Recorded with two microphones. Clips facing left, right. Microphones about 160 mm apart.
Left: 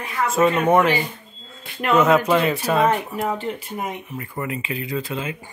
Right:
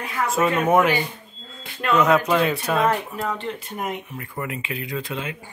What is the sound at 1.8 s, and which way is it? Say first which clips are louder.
Speech: left 2 dB; 25° left (ahead or behind).